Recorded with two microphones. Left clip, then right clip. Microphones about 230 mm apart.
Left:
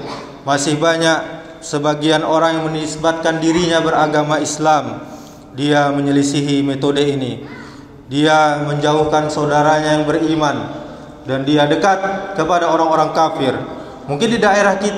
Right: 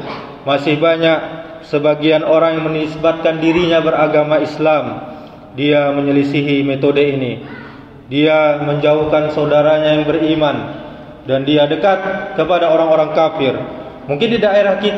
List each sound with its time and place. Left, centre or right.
0.7 s speech: left
2.7 s a man's voice: centre
3.0 s speech: left
8.1 s speech: left